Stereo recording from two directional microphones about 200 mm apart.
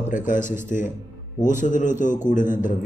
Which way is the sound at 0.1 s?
40° left (ahead or behind).